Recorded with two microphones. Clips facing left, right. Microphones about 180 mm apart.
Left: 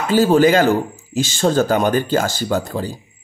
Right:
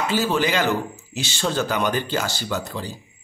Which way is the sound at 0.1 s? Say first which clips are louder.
Left 11 dB; 45° left (ahead or behind).